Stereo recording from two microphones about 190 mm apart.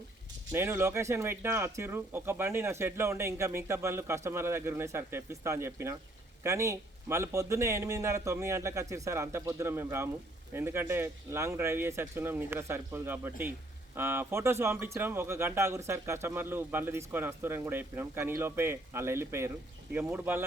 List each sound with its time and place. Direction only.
0.5 s speech: 10° right (ahead or behind)